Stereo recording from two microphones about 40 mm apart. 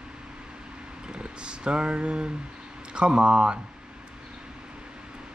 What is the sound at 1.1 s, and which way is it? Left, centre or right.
Speech, right.